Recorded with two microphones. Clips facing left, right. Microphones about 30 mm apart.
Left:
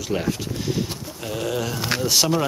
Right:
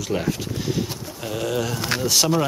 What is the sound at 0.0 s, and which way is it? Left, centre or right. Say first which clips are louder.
Speech: even; centre.